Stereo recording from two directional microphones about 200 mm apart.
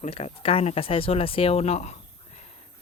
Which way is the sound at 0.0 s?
30° left (ahead or behind).